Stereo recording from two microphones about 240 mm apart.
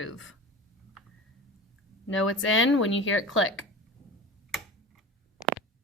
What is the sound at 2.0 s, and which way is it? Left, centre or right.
Speech, left.